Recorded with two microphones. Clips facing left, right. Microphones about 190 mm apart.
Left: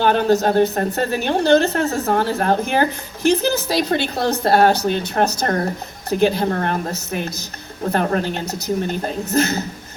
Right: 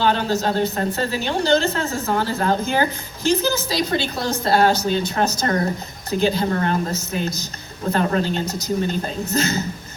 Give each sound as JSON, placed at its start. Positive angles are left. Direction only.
{"t": 0.0, "sound": "a woman's voice", "side_deg": 50}